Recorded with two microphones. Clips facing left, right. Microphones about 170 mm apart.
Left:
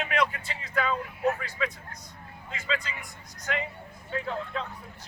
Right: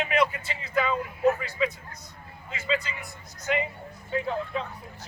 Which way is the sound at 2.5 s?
10° right (ahead or behind).